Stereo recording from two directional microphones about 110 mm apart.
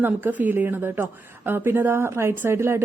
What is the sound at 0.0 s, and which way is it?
A woman's voice, 15° right (ahead or behind).